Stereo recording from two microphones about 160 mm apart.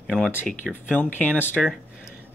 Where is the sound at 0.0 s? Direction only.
5° left (ahead or behind).